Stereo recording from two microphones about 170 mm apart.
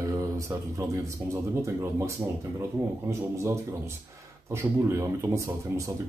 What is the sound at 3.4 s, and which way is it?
Speech, 15° right (ahead or behind).